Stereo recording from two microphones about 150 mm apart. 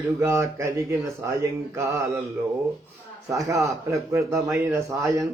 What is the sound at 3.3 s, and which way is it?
Mantra, 20° right (ahead or behind).